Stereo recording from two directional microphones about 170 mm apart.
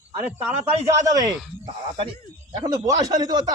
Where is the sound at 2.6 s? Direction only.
20° right (ahead or behind).